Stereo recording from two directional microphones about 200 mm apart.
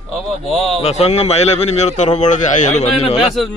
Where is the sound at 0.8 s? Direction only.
30° left (ahead or behind).